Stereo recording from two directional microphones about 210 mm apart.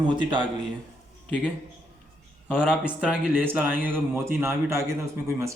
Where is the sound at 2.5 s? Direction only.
5° right (ahead or behind).